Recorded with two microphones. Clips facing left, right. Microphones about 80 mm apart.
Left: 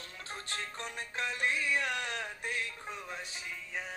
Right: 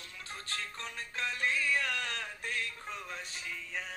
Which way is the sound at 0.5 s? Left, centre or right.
Centre.